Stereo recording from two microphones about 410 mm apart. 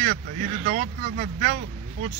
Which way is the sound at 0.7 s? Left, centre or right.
Right.